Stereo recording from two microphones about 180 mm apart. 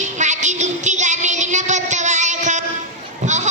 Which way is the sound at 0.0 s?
40° right (ahead or behind).